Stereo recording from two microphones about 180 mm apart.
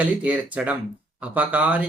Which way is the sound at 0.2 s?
10° right (ahead or behind).